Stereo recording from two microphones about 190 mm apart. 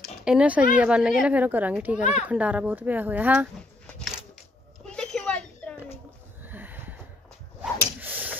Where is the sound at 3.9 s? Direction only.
Centre (ahead or behind).